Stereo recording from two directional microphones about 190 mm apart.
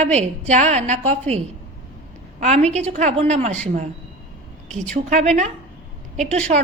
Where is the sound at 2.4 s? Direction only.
35° right (ahead or behind).